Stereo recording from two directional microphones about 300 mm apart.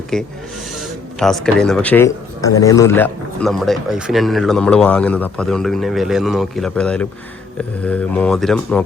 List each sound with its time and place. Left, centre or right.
0.1 s speech: centre